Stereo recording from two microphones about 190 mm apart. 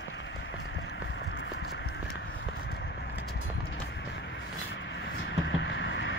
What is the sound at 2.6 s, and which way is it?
Vehicle, 65° left (ahead or behind).